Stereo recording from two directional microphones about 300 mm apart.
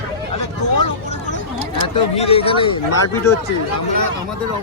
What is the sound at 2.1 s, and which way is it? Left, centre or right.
Speech, centre.